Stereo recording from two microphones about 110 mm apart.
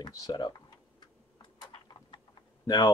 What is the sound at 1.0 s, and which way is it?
Typing, 45° left (ahead or behind).